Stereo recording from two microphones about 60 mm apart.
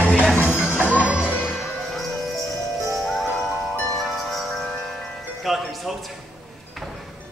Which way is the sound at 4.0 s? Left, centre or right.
Centre.